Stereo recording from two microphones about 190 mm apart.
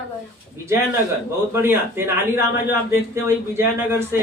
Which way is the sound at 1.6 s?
10° right (ahead or behind).